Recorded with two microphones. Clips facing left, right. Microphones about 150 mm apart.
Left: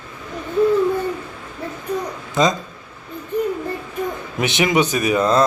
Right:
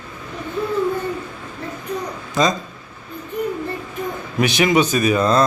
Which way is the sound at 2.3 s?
20° left (ahead or behind).